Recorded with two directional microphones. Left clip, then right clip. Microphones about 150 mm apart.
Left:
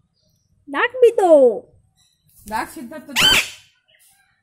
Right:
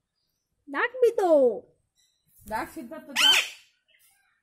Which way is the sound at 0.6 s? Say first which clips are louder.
Left 9 dB; 5° left (ahead or behind).